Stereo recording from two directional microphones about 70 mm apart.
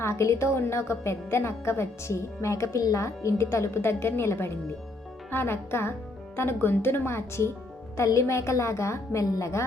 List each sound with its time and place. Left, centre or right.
0.0 s a woman's voice: left